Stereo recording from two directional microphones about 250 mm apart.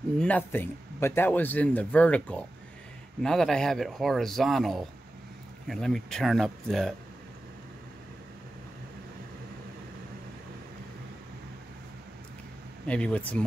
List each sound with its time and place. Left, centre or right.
0.2 s speech: centre
12.8 s speech: centre